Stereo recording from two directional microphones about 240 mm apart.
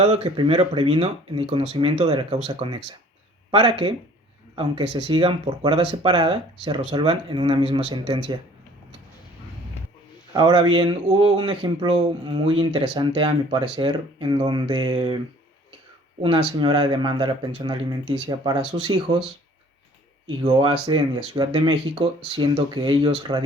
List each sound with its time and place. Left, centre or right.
0.0 s speech: right
10.3 s speech: centre
16.2 s speech: right
20.4 s speech: right